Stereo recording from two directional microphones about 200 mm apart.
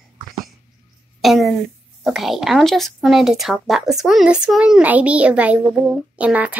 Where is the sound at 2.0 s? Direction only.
Centre (ahead or behind).